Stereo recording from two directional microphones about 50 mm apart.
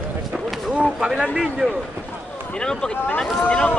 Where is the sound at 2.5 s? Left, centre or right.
Centre.